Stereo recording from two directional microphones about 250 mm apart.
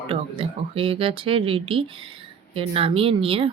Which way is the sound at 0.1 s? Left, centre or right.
Right.